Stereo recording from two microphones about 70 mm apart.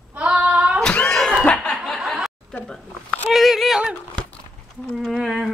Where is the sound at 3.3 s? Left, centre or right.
Centre.